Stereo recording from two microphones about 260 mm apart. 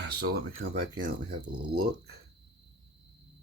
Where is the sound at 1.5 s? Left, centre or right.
Right.